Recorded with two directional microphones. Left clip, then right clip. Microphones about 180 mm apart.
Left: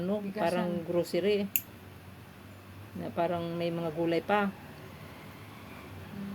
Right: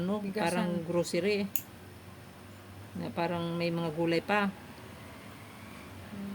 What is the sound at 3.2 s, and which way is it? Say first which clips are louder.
Speech: left 2 dB; 25° right (ahead or behind).